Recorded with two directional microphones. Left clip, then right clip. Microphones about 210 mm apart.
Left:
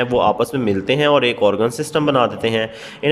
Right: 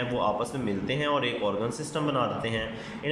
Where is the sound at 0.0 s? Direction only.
50° left (ahead or behind).